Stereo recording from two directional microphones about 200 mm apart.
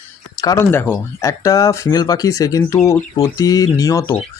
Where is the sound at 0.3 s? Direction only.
15° left (ahead or behind).